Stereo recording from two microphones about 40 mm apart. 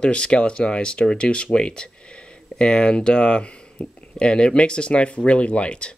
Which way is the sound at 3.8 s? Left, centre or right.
Left.